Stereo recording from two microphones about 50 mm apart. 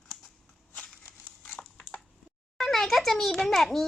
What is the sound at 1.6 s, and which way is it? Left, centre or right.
Crushing, left.